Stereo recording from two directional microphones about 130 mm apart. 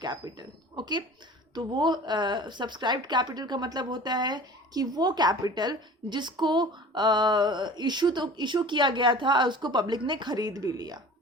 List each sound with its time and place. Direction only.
0.0 s speech: 30° right (ahead or behind)